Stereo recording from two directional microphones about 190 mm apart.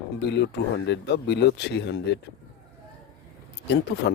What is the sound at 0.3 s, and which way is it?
Speech, 65° left (ahead or behind).